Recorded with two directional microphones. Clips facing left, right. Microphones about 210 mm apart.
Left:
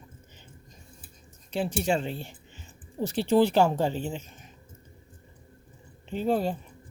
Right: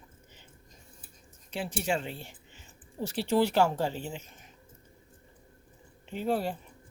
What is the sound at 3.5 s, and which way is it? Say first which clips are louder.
Speech: left 3 dB; 25° left (ahead or behind).